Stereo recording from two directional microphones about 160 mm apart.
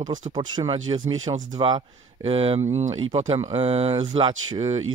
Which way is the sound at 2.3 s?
40° right (ahead or behind).